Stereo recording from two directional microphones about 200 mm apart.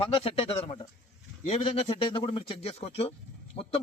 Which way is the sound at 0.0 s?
25° left (ahead or behind).